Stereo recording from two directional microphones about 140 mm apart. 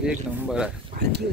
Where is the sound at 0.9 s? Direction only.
90° right.